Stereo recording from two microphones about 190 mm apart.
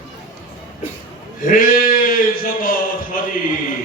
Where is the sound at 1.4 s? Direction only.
45° left (ahead or behind).